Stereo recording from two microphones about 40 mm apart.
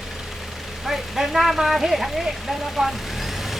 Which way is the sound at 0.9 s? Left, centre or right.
Centre.